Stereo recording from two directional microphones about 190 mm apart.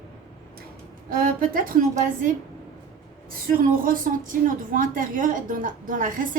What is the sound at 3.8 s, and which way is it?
A woman's voice, 45° right (ahead or behind).